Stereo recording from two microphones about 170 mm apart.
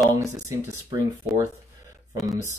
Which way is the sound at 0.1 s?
20° right (ahead or behind).